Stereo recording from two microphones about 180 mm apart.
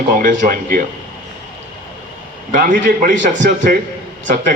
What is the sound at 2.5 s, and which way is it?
Speech, 45° right (ahead or behind).